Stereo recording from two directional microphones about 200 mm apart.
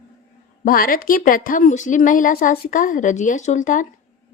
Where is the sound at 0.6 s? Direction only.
45° left (ahead or behind).